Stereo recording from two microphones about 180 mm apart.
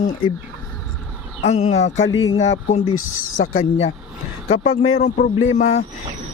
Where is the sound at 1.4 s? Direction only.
35° left (ahead or behind).